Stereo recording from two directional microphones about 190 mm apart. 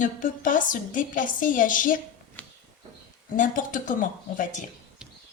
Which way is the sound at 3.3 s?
45° left (ahead or behind).